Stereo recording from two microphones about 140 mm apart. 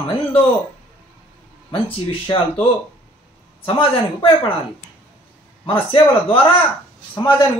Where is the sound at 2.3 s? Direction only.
35° left (ahead or behind).